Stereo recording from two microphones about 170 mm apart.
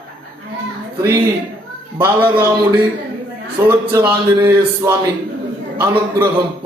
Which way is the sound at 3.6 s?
20° right (ahead or behind).